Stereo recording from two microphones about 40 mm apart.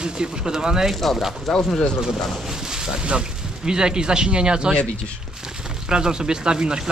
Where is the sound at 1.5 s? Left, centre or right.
Centre.